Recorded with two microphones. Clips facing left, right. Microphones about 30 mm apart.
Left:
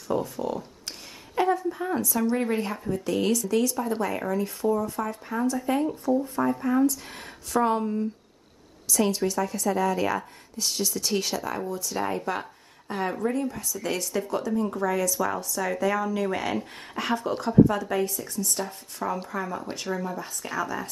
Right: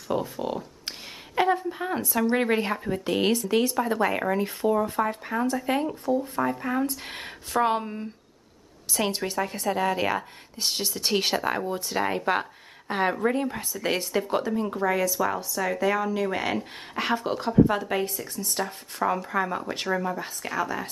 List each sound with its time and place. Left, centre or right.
0.1 s a woman's voice: right
6.6 s speech: right
6.9 s a woman's voice: right
15.1 s speech: centre
17.6 s a woman's voice: right
20.2 s speech: centre